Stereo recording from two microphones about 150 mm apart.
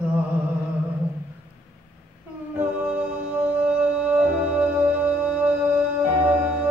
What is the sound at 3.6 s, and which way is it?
Music, 10° right (ahead or behind).